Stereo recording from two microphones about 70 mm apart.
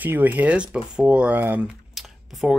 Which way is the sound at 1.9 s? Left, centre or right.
Centre.